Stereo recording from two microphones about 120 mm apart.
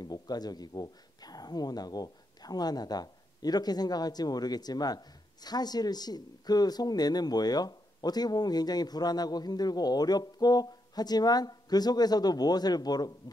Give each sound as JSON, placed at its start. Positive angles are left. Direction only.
{"t": 0.0, "sound": "speech", "side_deg": 35}